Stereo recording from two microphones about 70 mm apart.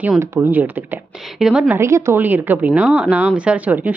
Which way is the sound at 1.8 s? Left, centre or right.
Right.